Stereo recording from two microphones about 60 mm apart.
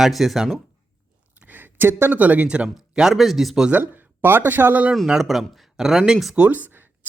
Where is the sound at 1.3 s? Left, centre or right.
Right.